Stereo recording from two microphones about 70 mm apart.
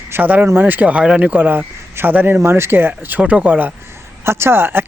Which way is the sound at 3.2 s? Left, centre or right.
Centre.